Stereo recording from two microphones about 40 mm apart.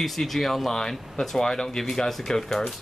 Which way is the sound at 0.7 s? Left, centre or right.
Centre.